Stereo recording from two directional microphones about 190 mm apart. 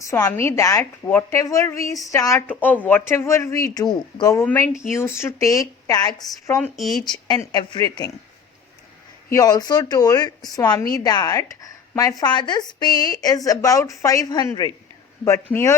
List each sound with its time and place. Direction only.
0.0 s a woman's voice: 15° left (ahead or behind)
6.6 s speech: centre (ahead or behind)
7.1 s a woman's voice: 20° left (ahead or behind)
9.3 s a woman's voice: 20° left (ahead or behind)